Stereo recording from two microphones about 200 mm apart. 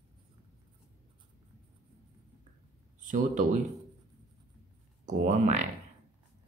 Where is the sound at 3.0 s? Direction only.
40° right (ahead or behind).